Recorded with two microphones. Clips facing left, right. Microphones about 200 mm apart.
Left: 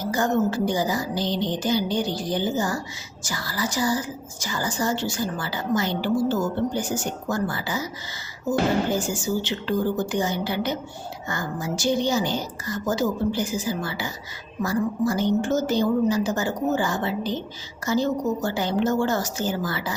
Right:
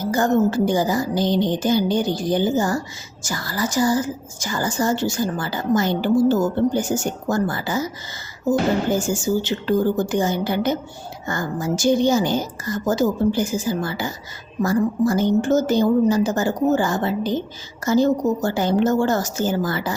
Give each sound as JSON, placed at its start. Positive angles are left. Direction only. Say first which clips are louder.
{"t": 0.0, "sound": "a woman's voice", "louder": "right 4 dB", "side_deg": -45}
{"t": 9.0, "sound": "a woman's voice", "louder": "right 4 dB", "side_deg": -45}